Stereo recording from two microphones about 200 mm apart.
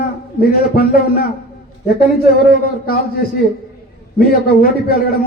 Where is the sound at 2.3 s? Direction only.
50° left (ahead or behind).